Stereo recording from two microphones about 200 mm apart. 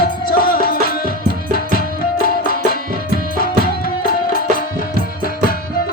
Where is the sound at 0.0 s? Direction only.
45° left (ahead or behind).